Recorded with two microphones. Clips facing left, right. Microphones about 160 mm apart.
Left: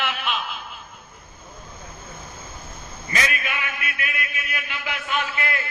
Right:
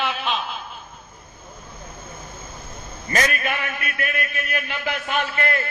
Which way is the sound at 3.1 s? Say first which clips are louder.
Right 4 dB; 45° right (ahead or behind).